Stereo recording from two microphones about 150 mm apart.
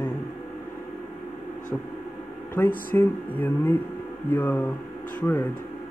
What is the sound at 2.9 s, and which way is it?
Speech, 10° left (ahead or behind).